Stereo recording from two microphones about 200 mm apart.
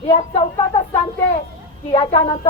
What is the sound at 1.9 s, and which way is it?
Speech, 25° left (ahead or behind).